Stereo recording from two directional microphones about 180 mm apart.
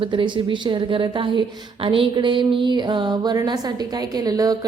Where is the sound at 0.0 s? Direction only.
25° right (ahead or behind).